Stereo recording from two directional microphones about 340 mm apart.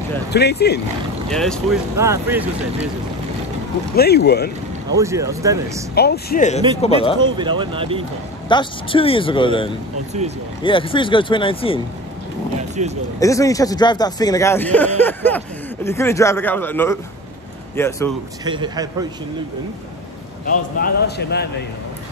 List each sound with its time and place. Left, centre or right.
0.3 s speech: left
1.3 s speech: centre
3.9 s speech: left
4.9 s speech: centre
5.9 s speech: left
7.3 s speech: centre
8.5 s speech: centre
12.8 s speech: centre
13.2 s speech: centre
18.4 s speech: centre
20.4 s speech: left